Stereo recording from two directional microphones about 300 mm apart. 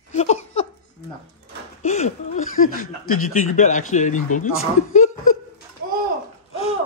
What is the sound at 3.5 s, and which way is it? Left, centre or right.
A man's voice, left.